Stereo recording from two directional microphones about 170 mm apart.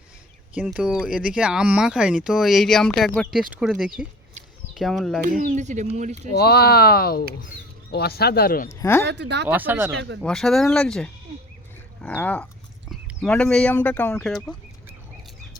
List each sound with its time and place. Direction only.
0.7 s speech: 5° right (ahead or behind)
5.4 s speech: 45° right (ahead or behind)
6.3 s speech: 70° left (ahead or behind)
8.7 s speech: 15° left (ahead or behind)
9.0 s speech: 90° right
9.5 s speech: 10° right (ahead or behind)
9.9 s speech: 90° right
10.2 s speech: centre (ahead or behind)